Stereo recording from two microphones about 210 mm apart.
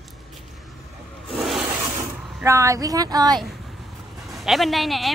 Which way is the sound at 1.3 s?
Centre (ahead or behind).